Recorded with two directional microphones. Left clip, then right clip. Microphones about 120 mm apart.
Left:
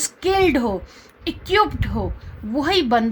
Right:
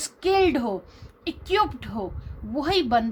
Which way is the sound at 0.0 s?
30° left (ahead or behind).